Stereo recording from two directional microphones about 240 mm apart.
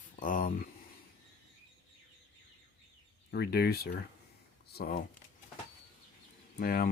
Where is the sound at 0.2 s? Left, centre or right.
Left.